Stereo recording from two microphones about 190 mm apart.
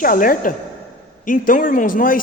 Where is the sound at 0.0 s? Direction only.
45° left (ahead or behind).